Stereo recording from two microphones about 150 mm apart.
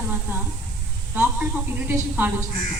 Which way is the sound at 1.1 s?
10° right (ahead or behind).